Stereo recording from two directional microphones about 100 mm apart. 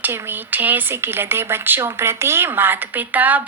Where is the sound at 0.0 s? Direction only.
15° right (ahead or behind).